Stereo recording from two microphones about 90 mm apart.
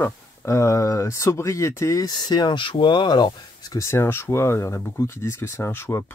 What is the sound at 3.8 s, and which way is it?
Speech, 30° left (ahead or behind).